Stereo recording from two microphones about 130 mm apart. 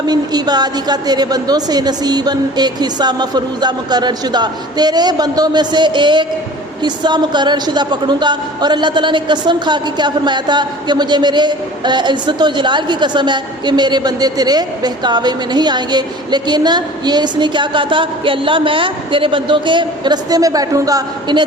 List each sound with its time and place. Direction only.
0.1 s a woman's voice: 30° right (ahead or behind)